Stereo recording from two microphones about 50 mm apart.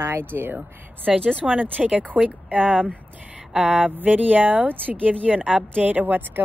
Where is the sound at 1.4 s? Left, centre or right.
Right.